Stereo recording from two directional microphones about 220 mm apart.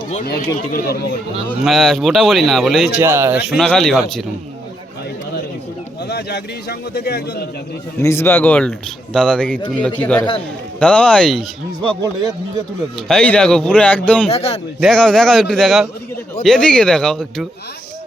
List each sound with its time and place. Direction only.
0.3 s speech: 45° left (ahead or behind)
1.5 s speech: centre (ahead or behind)
3.0 s speech: 10° right (ahead or behind)
6.1 s speech: 50° left (ahead or behind)
8.0 s a man's voice: 10° left (ahead or behind)
13.1 s speech: 5° left (ahead or behind)
14.3 s speech: 30° left (ahead or behind)
14.8 s speech: centre (ahead or behind)